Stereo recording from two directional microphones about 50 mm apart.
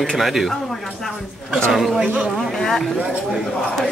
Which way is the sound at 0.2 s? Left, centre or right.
Centre.